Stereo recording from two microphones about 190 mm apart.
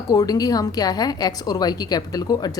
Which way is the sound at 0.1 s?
20° left (ahead or behind).